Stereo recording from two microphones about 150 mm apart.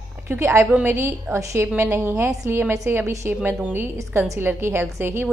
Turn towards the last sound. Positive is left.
turn(degrees=-15)  # may be behind; listen again after turning